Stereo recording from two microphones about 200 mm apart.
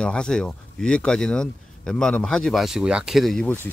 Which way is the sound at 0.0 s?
5° left (ahead or behind).